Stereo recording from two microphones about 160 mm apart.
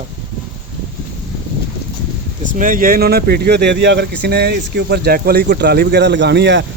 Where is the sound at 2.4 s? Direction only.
55° right (ahead or behind); by 6.7 s 90° right.